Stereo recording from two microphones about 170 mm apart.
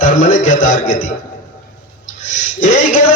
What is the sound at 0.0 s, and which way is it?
Speech, 50° left (ahead or behind).